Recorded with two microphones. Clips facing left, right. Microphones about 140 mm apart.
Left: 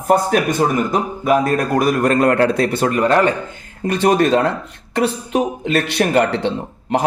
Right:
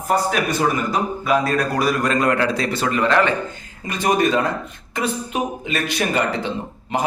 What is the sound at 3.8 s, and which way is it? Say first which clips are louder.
Speech: left 4 dB; 70° left (ahead or behind).